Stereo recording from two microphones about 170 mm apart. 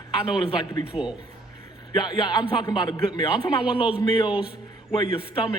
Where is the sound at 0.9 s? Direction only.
35° left (ahead or behind).